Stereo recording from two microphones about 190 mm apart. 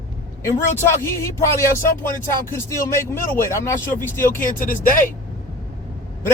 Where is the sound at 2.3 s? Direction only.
15° left (ahead or behind).